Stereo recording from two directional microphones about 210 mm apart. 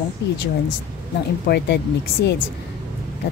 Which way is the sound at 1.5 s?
50° left (ahead or behind).